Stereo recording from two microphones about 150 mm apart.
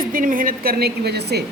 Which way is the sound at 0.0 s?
65° right (ahead or behind).